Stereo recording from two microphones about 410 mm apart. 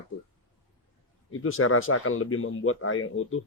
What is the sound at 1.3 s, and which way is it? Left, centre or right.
A man's voice, left.